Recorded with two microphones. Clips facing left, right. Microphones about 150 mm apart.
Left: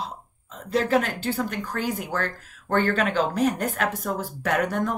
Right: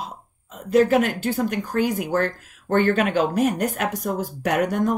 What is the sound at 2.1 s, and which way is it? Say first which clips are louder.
A woman's voice: right 6 dB; 45° right (ahead or behind).